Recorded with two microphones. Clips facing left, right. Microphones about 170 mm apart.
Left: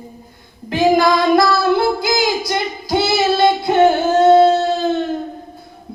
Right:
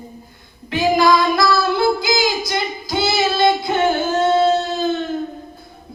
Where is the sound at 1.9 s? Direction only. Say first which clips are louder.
Left 1 dB; 55° left (ahead or behind).